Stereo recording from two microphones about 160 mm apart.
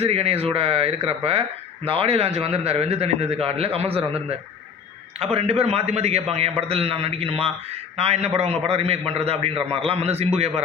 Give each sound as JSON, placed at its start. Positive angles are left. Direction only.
{"t": 0.0, "sound": "a man's voice", "side_deg": -40}